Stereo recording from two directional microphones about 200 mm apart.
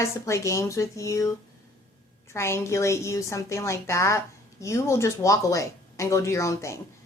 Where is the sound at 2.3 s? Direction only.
15° left (ahead or behind).